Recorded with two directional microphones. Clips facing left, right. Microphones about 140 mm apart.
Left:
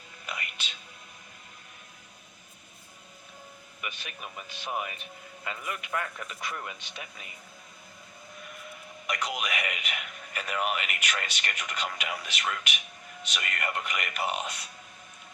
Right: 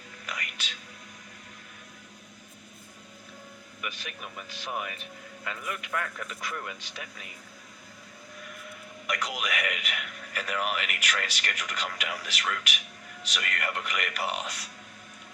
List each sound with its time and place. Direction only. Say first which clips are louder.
0.3 s whispering: even; 25° left (ahead or behind)
3.8 s a man's voice: right 1 dB; 20° left (ahead or behind)
9.0 s speech: even; 20° left (ahead or behind)